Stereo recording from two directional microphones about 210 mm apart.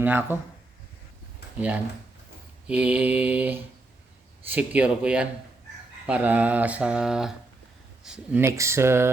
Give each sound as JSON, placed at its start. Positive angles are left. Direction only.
{"t": 0.0, "sound": "speech", "side_deg": -10}
{"t": 1.5, "sound": "speech", "side_deg": -5}
{"t": 6.1, "sound": "mantra", "side_deg": -5}
{"t": 8.0, "sound": "speech", "side_deg": -5}